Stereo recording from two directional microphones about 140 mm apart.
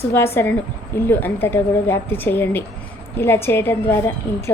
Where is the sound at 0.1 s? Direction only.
20° left (ahead or behind).